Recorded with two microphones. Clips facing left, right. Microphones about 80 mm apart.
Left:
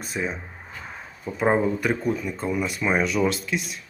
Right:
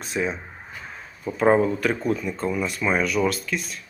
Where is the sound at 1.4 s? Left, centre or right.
Centre.